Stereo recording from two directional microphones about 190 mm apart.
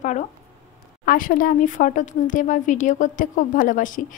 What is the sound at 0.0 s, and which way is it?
Speech, 40° left (ahead or behind).